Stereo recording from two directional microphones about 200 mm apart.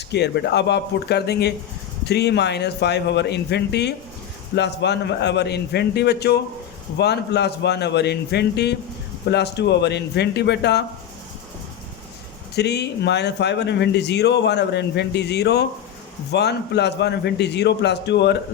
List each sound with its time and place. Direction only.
0.1 s speech: 55° left (ahead or behind)
12.5 s speech: 55° left (ahead or behind)